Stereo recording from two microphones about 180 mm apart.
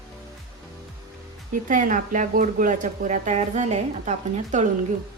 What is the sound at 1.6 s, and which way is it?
Speech, 45° right (ahead or behind).